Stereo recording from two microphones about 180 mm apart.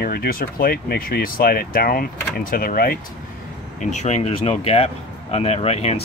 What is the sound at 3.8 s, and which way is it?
Speech, 40° left (ahead or behind).